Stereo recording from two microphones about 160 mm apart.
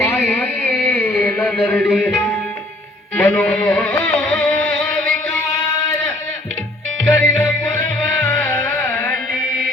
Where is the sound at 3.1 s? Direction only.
10° left (ahead or behind).